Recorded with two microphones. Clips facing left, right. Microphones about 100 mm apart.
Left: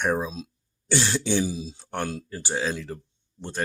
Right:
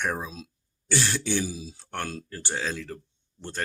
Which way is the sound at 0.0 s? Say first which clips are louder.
Left 5 dB; 20° left (ahead or behind).